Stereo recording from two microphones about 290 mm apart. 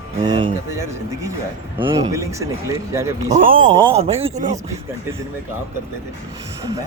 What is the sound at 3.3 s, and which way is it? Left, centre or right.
Speech, right.